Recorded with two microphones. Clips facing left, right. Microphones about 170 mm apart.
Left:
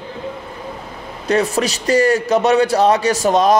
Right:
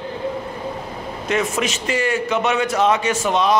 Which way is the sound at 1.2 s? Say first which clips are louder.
Left 5 dB; 35° left (ahead or behind).